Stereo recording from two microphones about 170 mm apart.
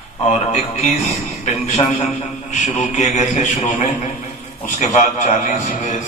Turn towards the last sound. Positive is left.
turn(degrees=50)  # may be behind; listen again after turning